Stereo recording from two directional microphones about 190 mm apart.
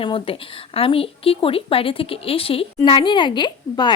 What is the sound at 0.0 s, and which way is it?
A woman's voice, 30° left (ahead or behind).